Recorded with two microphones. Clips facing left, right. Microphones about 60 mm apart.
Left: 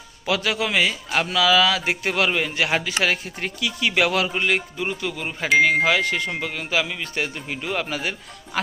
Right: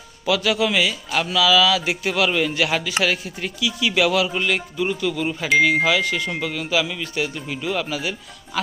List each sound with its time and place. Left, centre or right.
0.3 s a man's voice: left
4.4 s speech: left
5.8 s a man's voice: left
6.3 s a man's voice: left